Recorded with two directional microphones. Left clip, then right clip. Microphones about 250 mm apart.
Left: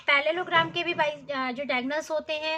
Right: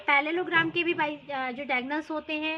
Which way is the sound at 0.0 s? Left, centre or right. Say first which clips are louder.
Left 1 dB; centre.